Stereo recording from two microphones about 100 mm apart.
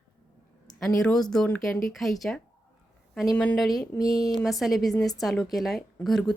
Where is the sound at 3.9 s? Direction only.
40° left (ahead or behind).